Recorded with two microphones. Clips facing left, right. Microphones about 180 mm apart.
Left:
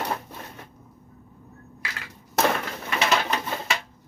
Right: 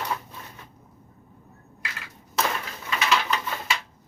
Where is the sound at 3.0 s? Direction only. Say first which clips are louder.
Left 1 dB; 45° left (ahead or behind).